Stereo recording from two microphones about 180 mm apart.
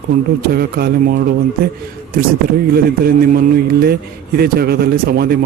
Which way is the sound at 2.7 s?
55° right (ahead or behind).